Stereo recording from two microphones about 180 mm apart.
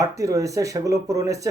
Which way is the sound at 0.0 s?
15° right (ahead or behind).